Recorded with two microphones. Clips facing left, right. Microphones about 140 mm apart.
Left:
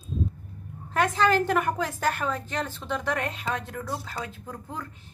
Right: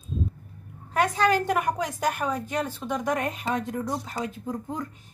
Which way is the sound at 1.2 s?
15° right (ahead or behind).